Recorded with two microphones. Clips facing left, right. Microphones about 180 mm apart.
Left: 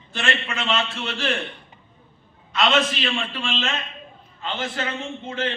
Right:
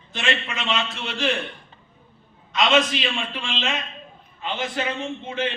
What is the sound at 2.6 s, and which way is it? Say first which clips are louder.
A man's voice: right 1 dB; 15° right (ahead or behind).